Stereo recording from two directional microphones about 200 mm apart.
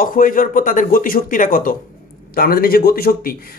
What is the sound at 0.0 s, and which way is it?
A man's voice, 45° left (ahead or behind).